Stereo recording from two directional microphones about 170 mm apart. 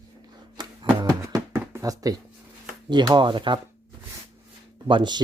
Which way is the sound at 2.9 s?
25° right (ahead or behind).